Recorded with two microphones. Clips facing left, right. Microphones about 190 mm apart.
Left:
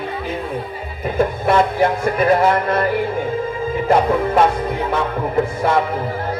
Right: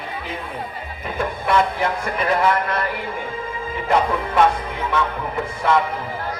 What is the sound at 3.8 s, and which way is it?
Music, 40° left (ahead or behind).